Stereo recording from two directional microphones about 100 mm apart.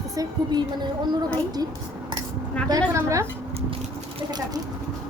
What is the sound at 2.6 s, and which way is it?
Speech, 35° right (ahead or behind).